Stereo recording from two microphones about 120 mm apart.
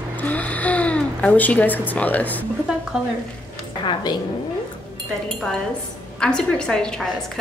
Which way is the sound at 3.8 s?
35° left (ahead or behind).